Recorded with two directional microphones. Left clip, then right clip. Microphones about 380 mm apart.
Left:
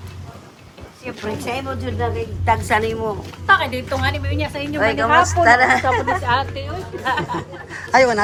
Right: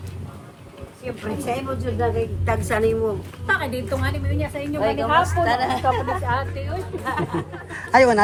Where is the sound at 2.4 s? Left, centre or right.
Centre.